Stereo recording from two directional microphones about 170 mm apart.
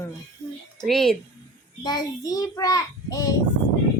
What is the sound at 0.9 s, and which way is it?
Speech, centre (ahead or behind).